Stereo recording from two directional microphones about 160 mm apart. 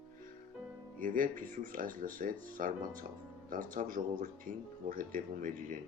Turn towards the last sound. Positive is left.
turn(degrees=-60)  # may be behind; listen again after turning